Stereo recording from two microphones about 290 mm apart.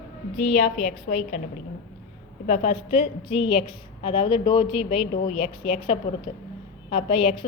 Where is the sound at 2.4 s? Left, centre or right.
Left.